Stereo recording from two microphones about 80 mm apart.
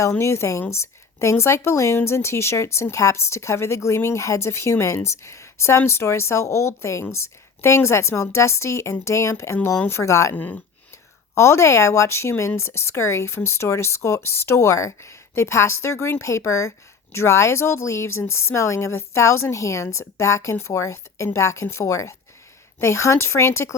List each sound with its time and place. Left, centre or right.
0.2 s speech: left
10.3 s speech: left
11.3 s speech: left